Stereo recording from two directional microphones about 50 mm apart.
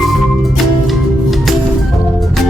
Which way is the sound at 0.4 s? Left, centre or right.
Centre.